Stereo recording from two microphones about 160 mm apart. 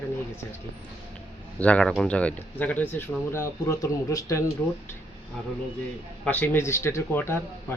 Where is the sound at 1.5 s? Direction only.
10° left (ahead or behind).